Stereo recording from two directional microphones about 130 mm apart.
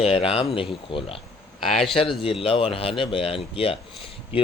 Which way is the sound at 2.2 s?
45° left (ahead or behind).